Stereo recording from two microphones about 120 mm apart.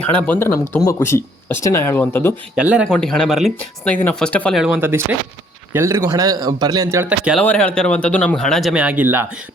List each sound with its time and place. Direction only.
0.0 s speech: 15° left (ahead or behind)
2.6 s speech: 10° right (ahead or behind)
2.9 s speech: 5° left (ahead or behind)
4.5 s speech: 5° right (ahead or behind)
4.8 s speech: 20° right (ahead or behind)
7.0 s speech: 15° right (ahead or behind)
7.4 s speech: 10° left (ahead or behind)
8.7 s speech: 10° right (ahead or behind)